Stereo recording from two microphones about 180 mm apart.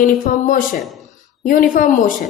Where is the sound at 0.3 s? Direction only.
50° left (ahead or behind).